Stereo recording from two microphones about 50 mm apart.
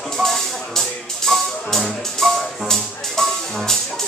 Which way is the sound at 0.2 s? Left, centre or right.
Centre.